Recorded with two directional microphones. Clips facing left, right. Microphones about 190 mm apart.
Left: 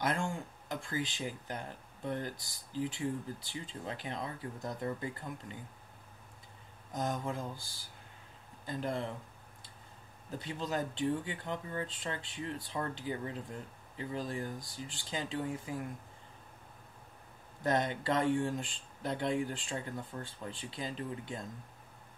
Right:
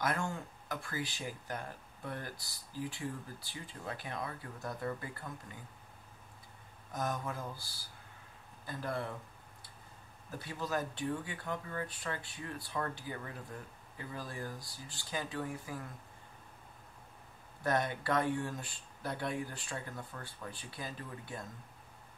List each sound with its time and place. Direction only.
0.0 s speech: 20° left (ahead or behind)
6.9 s speech: 20° left (ahead or behind)
10.4 s speech: 20° left (ahead or behind)
17.6 s speech: 20° left (ahead or behind)